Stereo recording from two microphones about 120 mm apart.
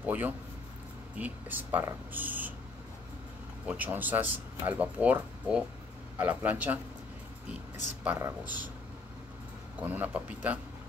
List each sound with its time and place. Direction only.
0.0 s a sound: 15° right (ahead or behind)
1.1 s speech: 15° right (ahead or behind)
3.6 s speech: 15° right (ahead or behind)
8.2 s speech: 20° right (ahead or behind)
9.8 s speech: 15° right (ahead or behind)